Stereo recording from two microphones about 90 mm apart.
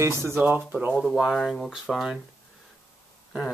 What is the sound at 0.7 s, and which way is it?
Speech, 15° right (ahead or behind).